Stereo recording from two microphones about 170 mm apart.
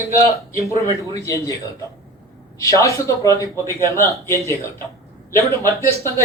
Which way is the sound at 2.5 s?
20° left (ahead or behind).